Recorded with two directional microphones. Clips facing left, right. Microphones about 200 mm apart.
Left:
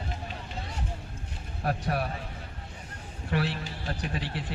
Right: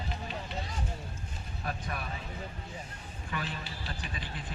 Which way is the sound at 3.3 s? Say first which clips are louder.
Left 8 dB; 75° left (ahead or behind).